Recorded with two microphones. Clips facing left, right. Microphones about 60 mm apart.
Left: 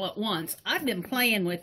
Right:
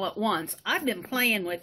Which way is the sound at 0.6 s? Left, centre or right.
Centre.